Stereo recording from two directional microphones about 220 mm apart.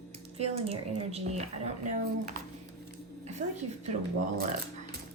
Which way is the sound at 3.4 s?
30° right (ahead or behind).